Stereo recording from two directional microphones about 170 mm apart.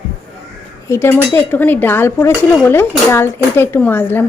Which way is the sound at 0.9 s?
15° left (ahead or behind).